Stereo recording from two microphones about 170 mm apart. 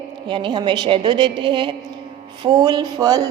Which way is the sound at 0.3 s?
30° right (ahead or behind).